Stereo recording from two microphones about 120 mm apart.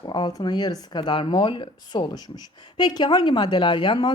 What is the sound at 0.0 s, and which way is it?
Speech, 40° left (ahead or behind).